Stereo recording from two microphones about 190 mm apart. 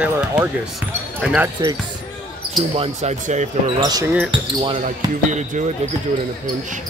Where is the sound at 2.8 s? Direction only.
40° right (ahead or behind).